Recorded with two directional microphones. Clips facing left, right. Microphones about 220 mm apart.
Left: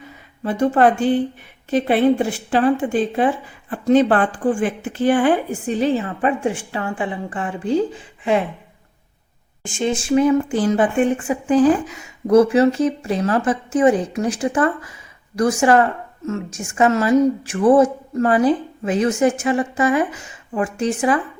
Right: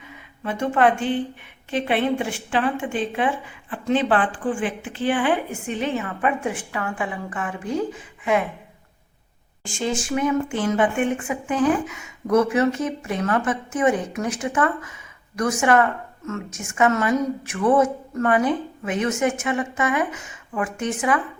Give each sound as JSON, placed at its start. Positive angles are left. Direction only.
{"t": 0.0, "sound": "a woman's voice", "side_deg": 35}
{"t": 9.6, "sound": "speech", "side_deg": 20}